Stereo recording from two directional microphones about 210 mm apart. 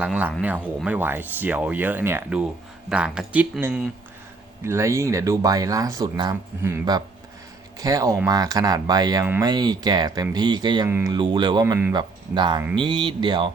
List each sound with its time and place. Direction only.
0.0 s speech: 5° right (ahead or behind)